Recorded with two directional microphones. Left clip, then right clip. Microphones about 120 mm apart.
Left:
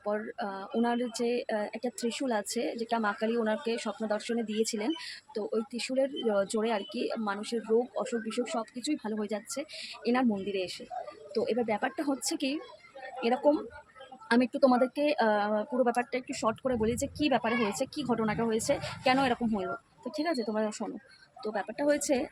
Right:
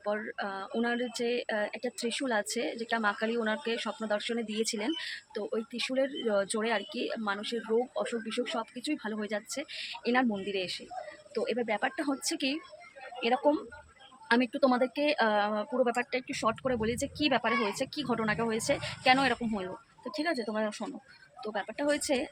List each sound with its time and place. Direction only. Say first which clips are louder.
0.0 s speech: even; 25° left (ahead or behind)